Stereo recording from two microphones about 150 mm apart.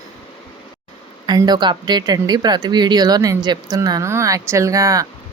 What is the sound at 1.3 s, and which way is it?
Speech, 30° right (ahead or behind).